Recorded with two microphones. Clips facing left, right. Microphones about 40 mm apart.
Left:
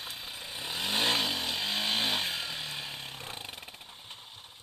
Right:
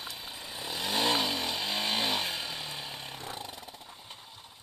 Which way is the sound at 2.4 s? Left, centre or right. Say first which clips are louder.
Left 1 dB; left.